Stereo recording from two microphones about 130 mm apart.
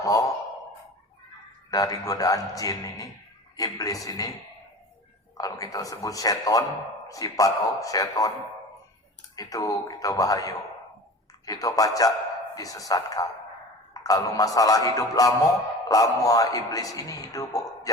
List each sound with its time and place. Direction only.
0.0 s sigh: 25° left (ahead or behind)
1.7 s speech: 25° left (ahead or behind)
5.4 s speech: 30° left (ahead or behind)
9.3 s speech: 30° left (ahead or behind)